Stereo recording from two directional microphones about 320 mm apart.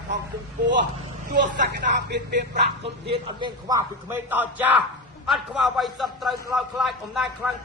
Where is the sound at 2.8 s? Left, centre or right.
Centre.